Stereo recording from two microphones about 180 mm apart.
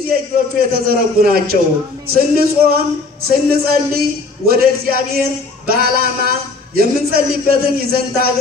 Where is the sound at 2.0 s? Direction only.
55° right (ahead or behind).